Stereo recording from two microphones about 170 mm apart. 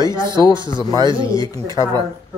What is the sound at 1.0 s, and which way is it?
Speech, 30° right (ahead or behind).